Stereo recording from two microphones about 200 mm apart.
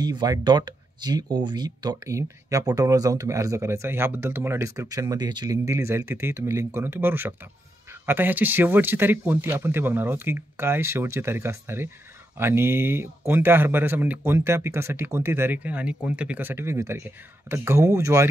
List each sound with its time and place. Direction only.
0.0 s speech: 20° right (ahead or behind)